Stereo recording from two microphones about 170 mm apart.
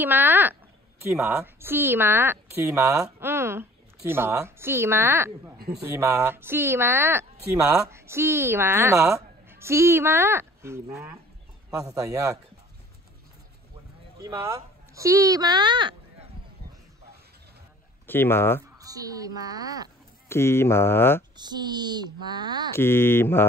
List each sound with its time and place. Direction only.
0.0 s a woman's voice: 10° right (ahead or behind)
14.1 s speech: 20° right (ahead or behind)
18.0 s speech: 10° left (ahead or behind)
18.8 s a woman's voice: 20° right (ahead or behind)
20.2 s speech: 15° left (ahead or behind)
21.4 s a woman's voice: 25° right (ahead or behind)
22.8 s speech: 15° left (ahead or behind)